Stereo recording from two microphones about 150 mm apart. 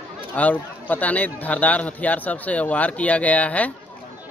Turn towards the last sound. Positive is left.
turn(degrees=10)  # may be behind; listen again after turning